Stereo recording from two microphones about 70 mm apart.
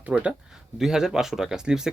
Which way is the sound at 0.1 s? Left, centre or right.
Centre.